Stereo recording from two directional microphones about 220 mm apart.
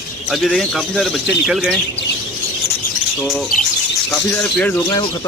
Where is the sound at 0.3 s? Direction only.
Centre (ahead or behind).